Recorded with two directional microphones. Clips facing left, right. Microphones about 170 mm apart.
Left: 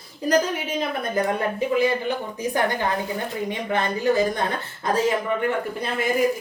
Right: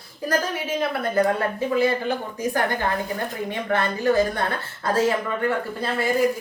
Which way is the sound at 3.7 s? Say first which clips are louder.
Right 1 dB; 20° left (ahead or behind).